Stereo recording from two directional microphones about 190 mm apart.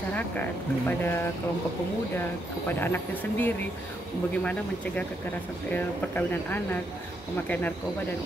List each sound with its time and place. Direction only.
0.1 s speech: 10° left (ahead or behind)
2.7 s speech: 10° left (ahead or behind)